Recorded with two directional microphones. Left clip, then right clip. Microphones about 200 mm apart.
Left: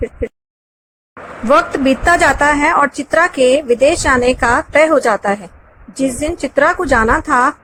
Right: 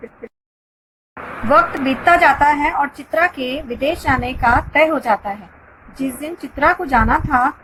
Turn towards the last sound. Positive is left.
turn(degrees=60)  # may be behind; listen again after turning